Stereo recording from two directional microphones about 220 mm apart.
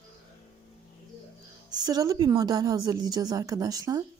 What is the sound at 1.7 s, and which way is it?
A woman's voice, 15° right (ahead or behind).